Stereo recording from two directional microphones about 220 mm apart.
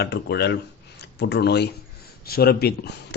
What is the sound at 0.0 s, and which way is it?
Speech, 50° left (ahead or behind).